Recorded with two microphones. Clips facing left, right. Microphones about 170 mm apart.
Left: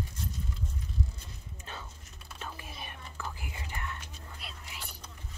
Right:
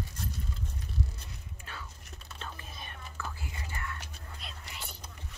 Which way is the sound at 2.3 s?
10° left (ahead or behind).